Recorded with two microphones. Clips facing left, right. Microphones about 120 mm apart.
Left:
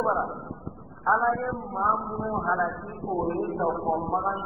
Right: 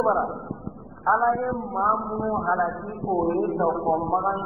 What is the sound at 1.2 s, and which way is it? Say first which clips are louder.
Speech: right 3 dB; 40° right (ahead or behind).